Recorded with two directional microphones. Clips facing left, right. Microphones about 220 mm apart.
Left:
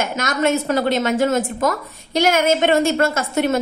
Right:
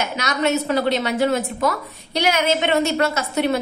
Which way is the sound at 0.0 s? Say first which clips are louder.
Left 2 dB; 50° left (ahead or behind).